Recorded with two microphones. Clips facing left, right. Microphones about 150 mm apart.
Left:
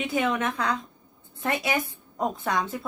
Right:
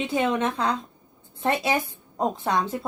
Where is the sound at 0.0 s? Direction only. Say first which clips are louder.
Right 2 dB; 30° right (ahead or behind).